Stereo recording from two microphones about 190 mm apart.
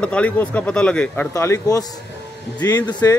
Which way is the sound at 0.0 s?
5° left (ahead or behind).